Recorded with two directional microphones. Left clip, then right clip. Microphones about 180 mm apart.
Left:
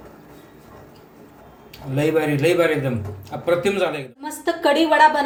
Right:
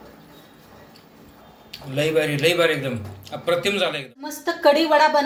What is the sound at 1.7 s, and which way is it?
A man's voice, 45° left (ahead or behind).